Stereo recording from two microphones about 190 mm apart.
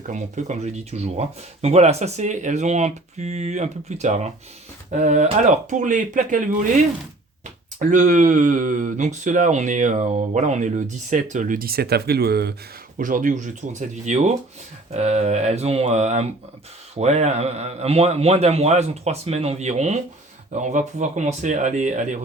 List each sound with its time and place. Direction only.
0.1 s speech: 40° right (ahead or behind)
7.8 s speech: 40° right (ahead or behind)
13.0 s speech: 45° right (ahead or behind)